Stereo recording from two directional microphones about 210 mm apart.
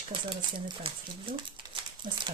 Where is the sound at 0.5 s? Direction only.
25° right (ahead or behind).